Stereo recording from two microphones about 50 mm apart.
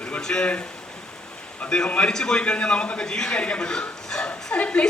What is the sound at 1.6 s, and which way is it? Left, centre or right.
A man's voice, centre.